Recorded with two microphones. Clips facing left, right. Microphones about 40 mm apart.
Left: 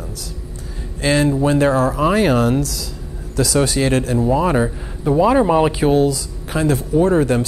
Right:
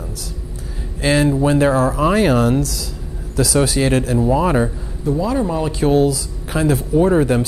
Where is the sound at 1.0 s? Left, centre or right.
Centre.